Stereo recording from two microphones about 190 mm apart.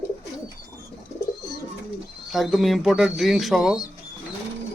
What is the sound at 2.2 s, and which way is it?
Speech, centre (ahead or behind).